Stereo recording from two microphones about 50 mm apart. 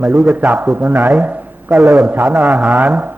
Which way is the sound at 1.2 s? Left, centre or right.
Right.